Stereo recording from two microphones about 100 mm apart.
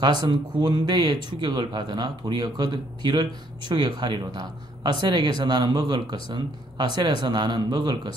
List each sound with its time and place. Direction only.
0.2 s speech: 45° right (ahead or behind)